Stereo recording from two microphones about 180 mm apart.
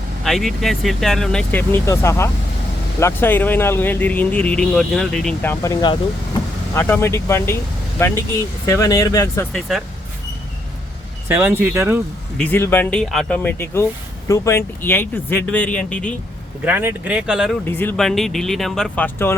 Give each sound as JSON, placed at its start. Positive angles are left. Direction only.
{"t": 0.3, "sound": "speech", "side_deg": 0}
{"t": 6.7, "sound": "speech", "side_deg": 10}
{"t": 9.5, "sound": "speech", "side_deg": 0}
{"t": 11.3, "sound": "speech", "side_deg": -15}
{"t": 12.4, "sound": "speech", "side_deg": 10}
{"t": 16.6, "sound": "speech", "side_deg": -10}
{"t": 17.7, "sound": "speech", "side_deg": 10}